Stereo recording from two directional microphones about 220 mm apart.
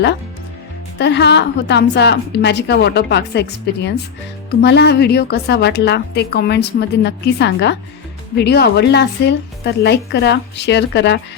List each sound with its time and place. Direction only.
0.9 s a woman's voice: 50° left (ahead or behind)